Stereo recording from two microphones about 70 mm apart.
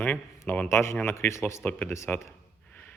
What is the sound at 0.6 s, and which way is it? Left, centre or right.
Speech, left.